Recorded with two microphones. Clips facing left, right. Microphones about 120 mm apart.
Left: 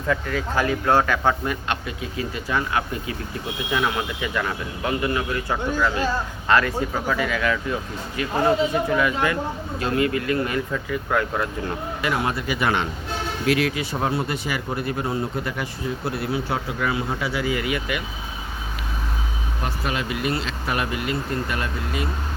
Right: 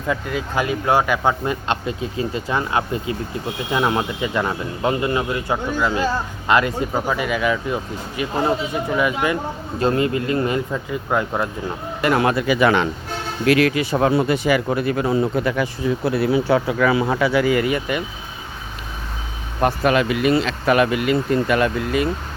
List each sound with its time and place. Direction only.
0.1 s speech: 15° right (ahead or behind)
1.6 s speech: 25° right (ahead or behind)
9.8 s speech: 30° right (ahead or behind)
12.0 s speech: 65° right (ahead or behind); by 12.5 s 85° right
13.5 s speech: 65° right (ahead or behind)
17.7 s speech: 35° right (ahead or behind)
19.6 s speech: 70° right (ahead or behind)